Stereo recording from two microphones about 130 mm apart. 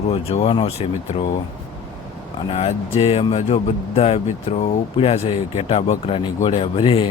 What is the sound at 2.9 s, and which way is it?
Speech, 50° left (ahead or behind).